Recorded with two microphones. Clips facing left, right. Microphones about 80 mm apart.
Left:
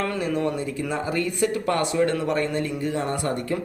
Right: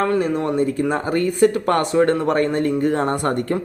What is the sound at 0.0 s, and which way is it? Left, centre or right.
Speech, right.